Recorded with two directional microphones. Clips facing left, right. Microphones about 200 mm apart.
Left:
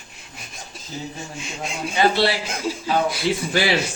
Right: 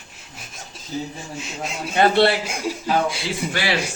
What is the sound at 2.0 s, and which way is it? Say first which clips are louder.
Speech: right 3 dB; 55° right (ahead or behind).